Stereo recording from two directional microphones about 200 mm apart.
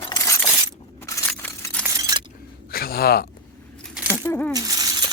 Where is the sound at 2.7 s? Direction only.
50° left (ahead or behind).